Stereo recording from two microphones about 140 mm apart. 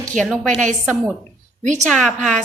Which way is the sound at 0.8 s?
10° right (ahead or behind).